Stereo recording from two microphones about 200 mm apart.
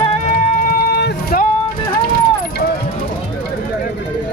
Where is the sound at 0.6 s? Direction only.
50° left (ahead or behind).